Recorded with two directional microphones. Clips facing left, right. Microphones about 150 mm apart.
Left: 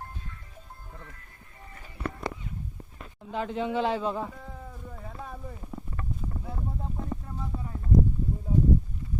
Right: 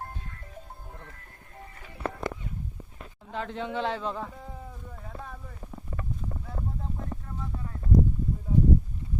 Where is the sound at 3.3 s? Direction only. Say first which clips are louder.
Left 3 dB; 10° left (ahead or behind).